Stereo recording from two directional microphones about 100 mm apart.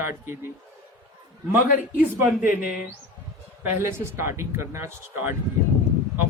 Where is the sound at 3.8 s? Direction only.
25° right (ahead or behind).